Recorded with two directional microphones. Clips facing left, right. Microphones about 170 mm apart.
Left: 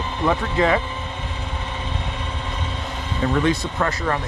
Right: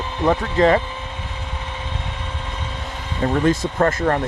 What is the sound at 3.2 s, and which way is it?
Speech, 45° right (ahead or behind).